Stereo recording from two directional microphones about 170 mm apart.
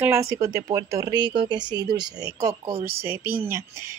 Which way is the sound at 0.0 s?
15° right (ahead or behind).